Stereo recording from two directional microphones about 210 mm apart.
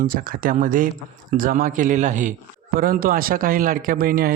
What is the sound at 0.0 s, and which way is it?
A man's voice, 40° right (ahead or behind).